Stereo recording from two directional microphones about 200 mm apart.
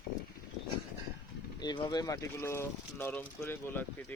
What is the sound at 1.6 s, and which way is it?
Speech, 20° left (ahead or behind).